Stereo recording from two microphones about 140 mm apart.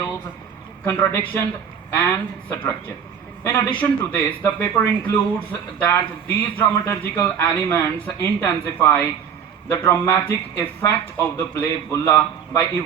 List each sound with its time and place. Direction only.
0.9 s speech: 15° left (ahead or behind)